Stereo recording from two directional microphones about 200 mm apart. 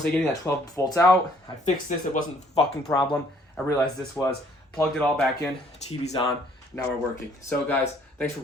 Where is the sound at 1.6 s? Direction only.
40° left (ahead or behind).